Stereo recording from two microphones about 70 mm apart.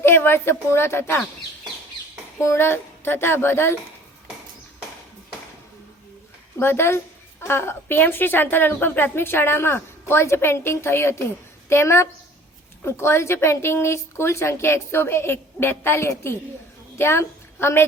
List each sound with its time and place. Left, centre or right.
0.0 s a woman's voice: left
2.4 s a woman's voice: left
6.6 s a woman's voice: left